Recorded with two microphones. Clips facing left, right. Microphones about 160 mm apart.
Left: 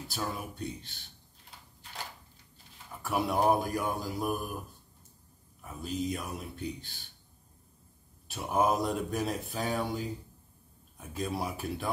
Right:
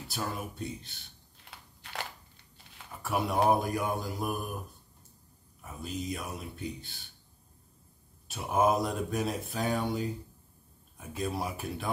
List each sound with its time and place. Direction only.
0.1 s speech: centre (ahead or behind)
1.4 s crushing: 75° right (ahead or behind)
3.0 s speech: centre (ahead or behind)
5.6 s speech: centre (ahead or behind)
8.3 s speech: centre (ahead or behind)